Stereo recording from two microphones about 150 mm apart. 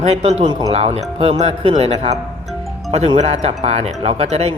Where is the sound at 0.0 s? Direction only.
45° right (ahead or behind).